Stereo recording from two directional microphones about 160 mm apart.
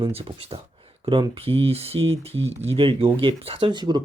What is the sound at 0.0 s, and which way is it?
Speech, 35° right (ahead or behind).